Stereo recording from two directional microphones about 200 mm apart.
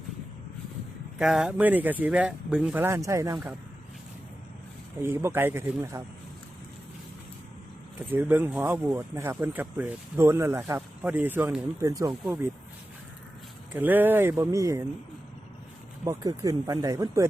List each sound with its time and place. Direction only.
1.2 s speech: 5° right (ahead or behind)
5.0 s speech: 10° right (ahead or behind)
8.1 s speech: 10° right (ahead or behind)
13.7 s speech: 10° right (ahead or behind)
16.0 s speech: 20° right (ahead or behind)